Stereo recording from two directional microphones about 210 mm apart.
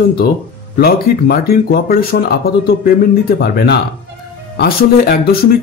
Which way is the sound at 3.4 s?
50° left (ahead or behind).